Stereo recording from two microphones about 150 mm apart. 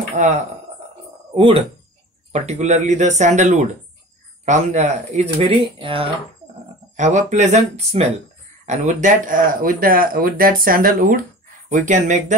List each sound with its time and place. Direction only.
1.3 s speech: 35° right (ahead or behind)
2.3 s speech: 50° right (ahead or behind)
7.0 s speech: 50° right (ahead or behind)
11.7 s speech: 55° right (ahead or behind)